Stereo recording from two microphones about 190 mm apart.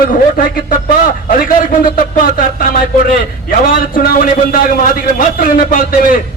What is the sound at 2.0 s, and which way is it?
A man's voice, 45° left (ahead or behind).